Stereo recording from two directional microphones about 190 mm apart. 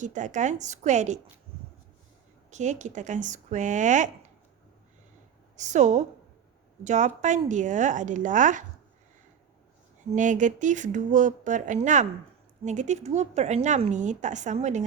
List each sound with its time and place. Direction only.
0.0 s speech: 40° right (ahead or behind)
2.5 s speech: 40° right (ahead or behind)
5.5 s speech: 40° right (ahead or behind)
10.2 s speech: 40° right (ahead or behind)